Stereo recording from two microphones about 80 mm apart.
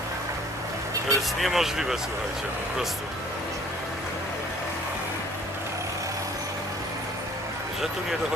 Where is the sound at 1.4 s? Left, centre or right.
Centre.